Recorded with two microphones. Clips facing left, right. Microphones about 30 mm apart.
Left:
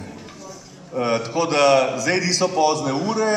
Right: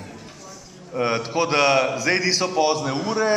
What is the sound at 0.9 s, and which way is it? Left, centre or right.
A man's voice, centre.